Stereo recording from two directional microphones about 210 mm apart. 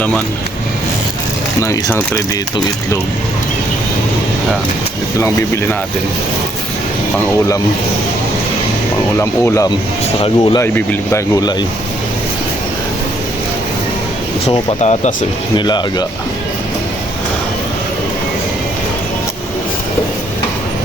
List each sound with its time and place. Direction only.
1.6 s speech: 10° left (ahead or behind)
9.1 s speech: 10° left (ahead or behind)
10.2 s speech: 25° left (ahead or behind)
10.6 s speech: 15° left (ahead or behind)
14.4 s speech: 25° left (ahead or behind)
15.5 s speech: 20° left (ahead or behind)